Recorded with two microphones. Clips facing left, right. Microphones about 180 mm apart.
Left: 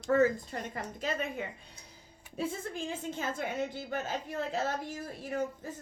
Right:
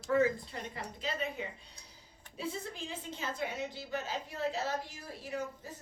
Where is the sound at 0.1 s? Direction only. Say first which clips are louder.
Left 3 dB; 45° left (ahead or behind).